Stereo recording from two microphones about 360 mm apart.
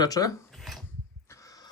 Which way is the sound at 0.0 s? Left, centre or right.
Centre.